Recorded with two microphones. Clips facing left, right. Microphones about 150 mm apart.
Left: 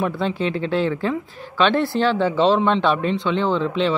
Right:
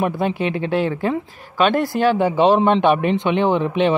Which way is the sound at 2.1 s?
15° right (ahead or behind).